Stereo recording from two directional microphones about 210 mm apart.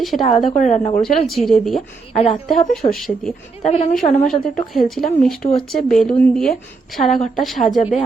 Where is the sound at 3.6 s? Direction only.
30° left (ahead or behind).